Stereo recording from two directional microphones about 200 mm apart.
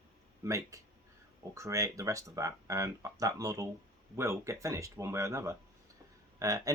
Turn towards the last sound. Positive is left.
turn(degrees=-15)  # may be behind; listen again after turning